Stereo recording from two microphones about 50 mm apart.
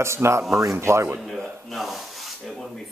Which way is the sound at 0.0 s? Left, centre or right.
Right.